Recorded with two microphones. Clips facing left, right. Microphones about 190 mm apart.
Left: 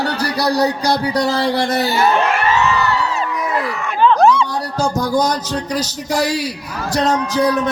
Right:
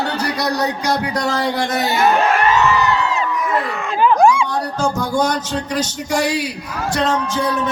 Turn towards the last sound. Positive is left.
turn(degrees=40)  # may be behind; listen again after turning